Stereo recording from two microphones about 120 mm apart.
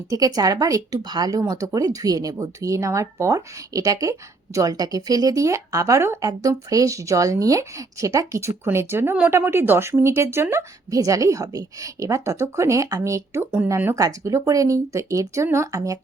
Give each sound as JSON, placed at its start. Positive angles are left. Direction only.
{"t": 0.1, "sound": "speech", "side_deg": -30}